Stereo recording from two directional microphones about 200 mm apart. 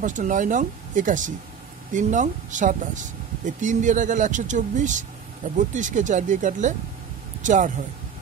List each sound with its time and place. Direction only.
0.0 s speech: 40° right (ahead or behind)